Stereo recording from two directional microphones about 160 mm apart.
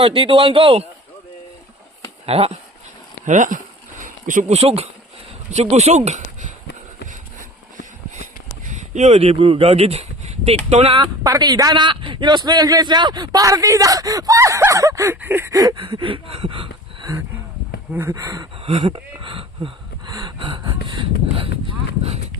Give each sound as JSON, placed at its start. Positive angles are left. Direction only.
{"t": 0.0, "sound": "speech", "side_deg": -35}
{"t": 2.2, "sound": "speech", "side_deg": -40}
{"t": 3.2, "sound": "speech", "side_deg": -50}
{"t": 6.1, "sound": "a sound", "side_deg": -50}
{"t": 8.6, "sound": "speech", "side_deg": -50}
{"t": 18.6, "sound": "speech", "side_deg": -30}
{"t": 20.1, "sound": "gasp", "side_deg": -20}
{"t": 20.4, "sound": "speech", "side_deg": -30}